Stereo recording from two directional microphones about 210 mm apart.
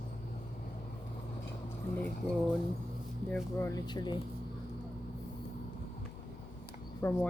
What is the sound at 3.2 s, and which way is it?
Speech, 10° left (ahead or behind).